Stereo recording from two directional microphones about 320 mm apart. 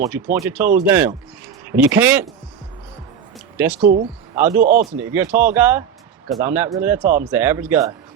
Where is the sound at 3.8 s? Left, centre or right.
Right.